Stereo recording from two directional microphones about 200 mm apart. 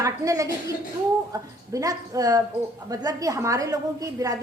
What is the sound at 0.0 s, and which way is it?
A woman's voice, 15° right (ahead or behind).